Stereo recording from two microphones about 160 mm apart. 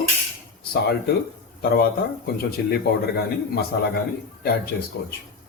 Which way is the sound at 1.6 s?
70° left (ahead or behind).